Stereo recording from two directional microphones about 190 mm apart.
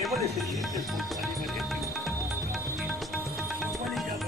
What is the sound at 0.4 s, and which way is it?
Music, centre (ahead or behind).